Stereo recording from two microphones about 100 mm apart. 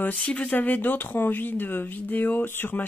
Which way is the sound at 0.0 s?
15° left (ahead or behind).